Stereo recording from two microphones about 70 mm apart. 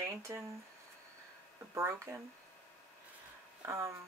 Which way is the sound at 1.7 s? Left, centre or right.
Right.